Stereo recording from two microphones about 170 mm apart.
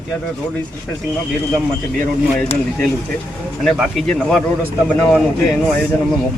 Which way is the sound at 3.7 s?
Centre (ahead or behind).